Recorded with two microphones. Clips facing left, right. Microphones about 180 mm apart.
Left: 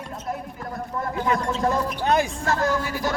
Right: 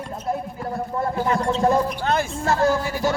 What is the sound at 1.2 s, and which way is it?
Speech, 30° right (ahead or behind).